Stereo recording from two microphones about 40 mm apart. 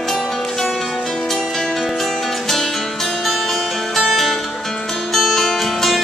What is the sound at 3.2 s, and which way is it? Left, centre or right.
Music, centre.